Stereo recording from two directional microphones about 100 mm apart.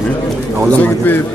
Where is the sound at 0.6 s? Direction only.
20° left (ahead or behind).